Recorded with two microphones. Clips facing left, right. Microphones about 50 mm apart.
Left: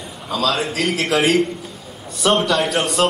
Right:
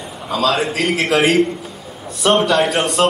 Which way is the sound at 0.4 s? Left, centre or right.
Centre.